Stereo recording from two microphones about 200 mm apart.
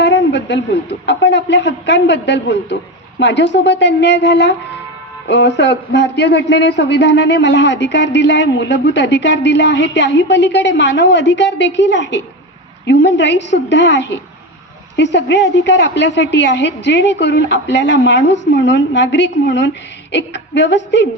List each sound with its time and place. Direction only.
0.0 s a man's voice: 60° left (ahead or behind)